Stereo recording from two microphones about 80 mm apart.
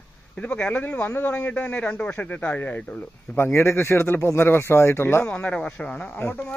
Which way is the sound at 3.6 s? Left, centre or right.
Left.